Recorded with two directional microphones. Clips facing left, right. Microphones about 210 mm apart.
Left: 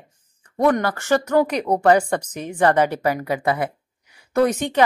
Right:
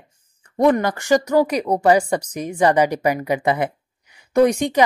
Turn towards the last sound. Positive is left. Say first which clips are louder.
# right 3 dB
turn(degrees=-10)  # may be behind; listen again after turning